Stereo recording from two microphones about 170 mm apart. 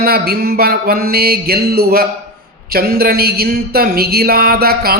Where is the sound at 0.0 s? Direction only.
65° right (ahead or behind).